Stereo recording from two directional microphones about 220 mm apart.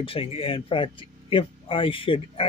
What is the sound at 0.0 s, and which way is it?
Speech, 25° left (ahead or behind).